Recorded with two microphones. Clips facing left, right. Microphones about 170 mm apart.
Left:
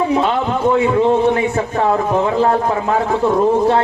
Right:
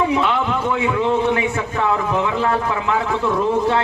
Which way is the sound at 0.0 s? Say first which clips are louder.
Left 3 dB; 40° left (ahead or behind).